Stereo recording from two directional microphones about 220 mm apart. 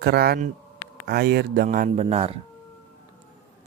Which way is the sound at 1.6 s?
35° right (ahead or behind).